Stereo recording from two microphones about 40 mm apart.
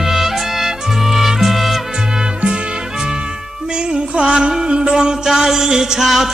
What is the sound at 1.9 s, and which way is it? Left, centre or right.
Music, centre.